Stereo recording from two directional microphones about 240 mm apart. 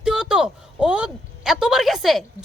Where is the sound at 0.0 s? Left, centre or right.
Centre.